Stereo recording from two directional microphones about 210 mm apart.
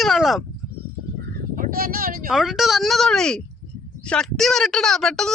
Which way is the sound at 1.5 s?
45° right (ahead or behind).